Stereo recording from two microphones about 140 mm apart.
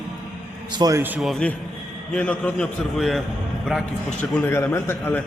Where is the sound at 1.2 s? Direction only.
5° left (ahead or behind).